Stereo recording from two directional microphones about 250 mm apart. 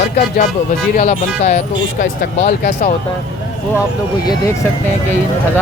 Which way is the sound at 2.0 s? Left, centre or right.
Left.